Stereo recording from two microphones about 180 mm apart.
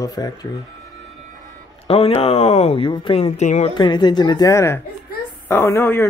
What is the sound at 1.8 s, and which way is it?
Speech, 35° left (ahead or behind).